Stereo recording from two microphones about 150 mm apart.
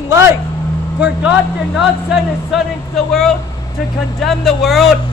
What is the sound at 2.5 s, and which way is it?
Speech, centre (ahead or behind).